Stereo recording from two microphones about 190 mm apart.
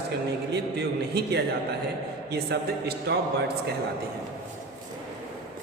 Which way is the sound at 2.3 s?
60° right (ahead or behind).